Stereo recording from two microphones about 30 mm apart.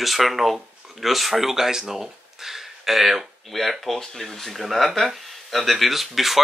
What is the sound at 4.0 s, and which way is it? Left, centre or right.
Speech, centre.